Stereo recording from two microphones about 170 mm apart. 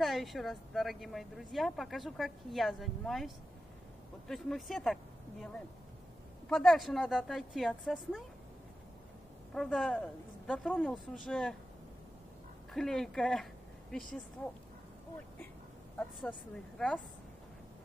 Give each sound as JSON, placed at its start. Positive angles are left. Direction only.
{"t": 0.0, "sound": "speech", "side_deg": 0}
{"t": 4.3, "sound": "speech", "side_deg": 0}
{"t": 6.5, "sound": "speech", "side_deg": 0}
{"t": 9.5, "sound": "speech", "side_deg": 5}
{"t": 12.7, "sound": "speech", "side_deg": 0}
{"t": 16.3, "sound": "speech", "side_deg": 5}